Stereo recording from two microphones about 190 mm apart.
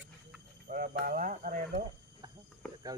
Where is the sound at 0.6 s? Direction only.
45° right (ahead or behind).